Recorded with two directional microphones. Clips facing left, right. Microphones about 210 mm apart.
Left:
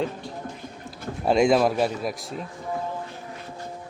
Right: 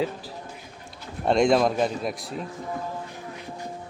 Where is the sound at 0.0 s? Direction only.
5° right (ahead or behind).